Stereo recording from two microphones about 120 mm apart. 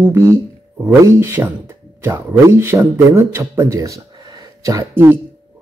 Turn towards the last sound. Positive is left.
turn(degrees=-20)  # may be behind; listen again after turning